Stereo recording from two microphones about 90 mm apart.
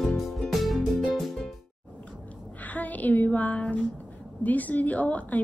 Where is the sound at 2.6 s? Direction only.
20° left (ahead or behind).